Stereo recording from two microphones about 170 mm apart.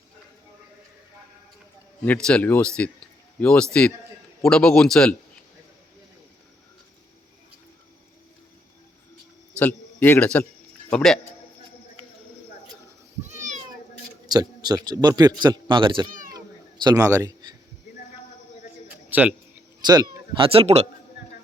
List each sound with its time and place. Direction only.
2.0 s a man's voice: 5° left (ahead or behind)
9.6 s a man's voice: 10° left (ahead or behind)
13.2 s cat: 45° right (ahead or behind)
14.3 s a man's voice: 25° right (ahead or behind)
18.9 s a sound: 10° right (ahead or behind)
19.8 s speech: 25° right (ahead or behind)